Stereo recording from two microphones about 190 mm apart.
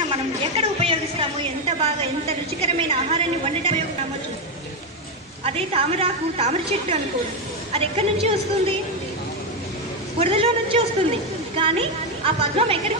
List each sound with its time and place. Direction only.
0.4 s a sound: 35° right (ahead or behind)
1.8 s a woman's voice: 35° right (ahead or behind)
5.4 s a woman's voice: 30° right (ahead or behind)
10.1 s a woman's voice: 30° right (ahead or behind)